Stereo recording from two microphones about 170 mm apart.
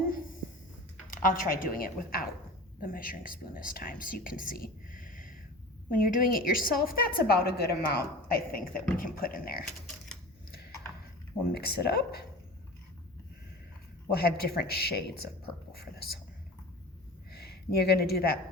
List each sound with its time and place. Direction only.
1.0 s a woman's voice: 55° left (ahead or behind)
11.8 s a man's voice: 70° left (ahead or behind)
14.1 s a man's voice: 70° left (ahead or behind)
15.7 s whispering: 65° left (ahead or behind)
17.3 s speech: 70° left (ahead or behind)